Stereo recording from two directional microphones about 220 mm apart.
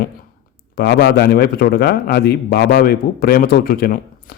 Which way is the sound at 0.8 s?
50° left (ahead or behind).